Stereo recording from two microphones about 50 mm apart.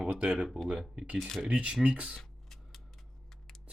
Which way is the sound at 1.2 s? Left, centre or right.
Centre.